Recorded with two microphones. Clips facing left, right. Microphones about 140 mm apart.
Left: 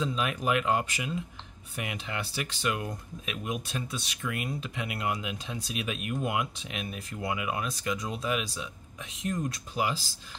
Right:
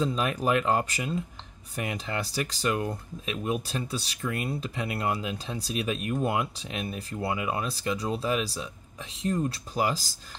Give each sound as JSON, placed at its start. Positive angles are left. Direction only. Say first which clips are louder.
{"t": 0.0, "sound": "speech", "louder": "right 3 dB", "side_deg": -35}